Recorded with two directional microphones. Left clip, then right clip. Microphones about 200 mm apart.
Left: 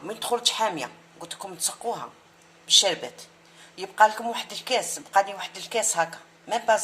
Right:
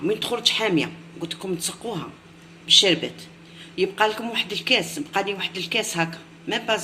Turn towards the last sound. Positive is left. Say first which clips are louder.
# left 1 dB
turn(degrees=40)  # may be behind; listen again after turning